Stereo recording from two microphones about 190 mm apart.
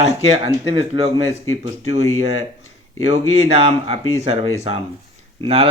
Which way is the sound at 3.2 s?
90° left.